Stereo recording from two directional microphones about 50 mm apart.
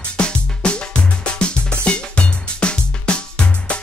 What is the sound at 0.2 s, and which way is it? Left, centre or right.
Music, centre.